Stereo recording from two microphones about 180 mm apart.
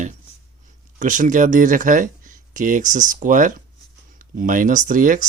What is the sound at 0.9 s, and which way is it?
Speech, 45° right (ahead or behind).